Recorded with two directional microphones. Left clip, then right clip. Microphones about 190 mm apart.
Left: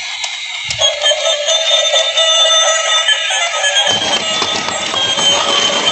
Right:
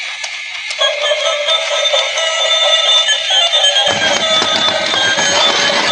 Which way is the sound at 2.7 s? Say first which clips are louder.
Right 1 dB; 50° right (ahead or behind).